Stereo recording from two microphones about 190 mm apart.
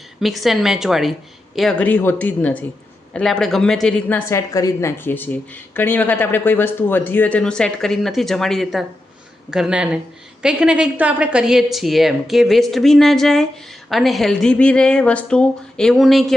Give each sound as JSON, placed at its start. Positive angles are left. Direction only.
{"t": 0.2, "sound": "a woman's voice", "side_deg": 0}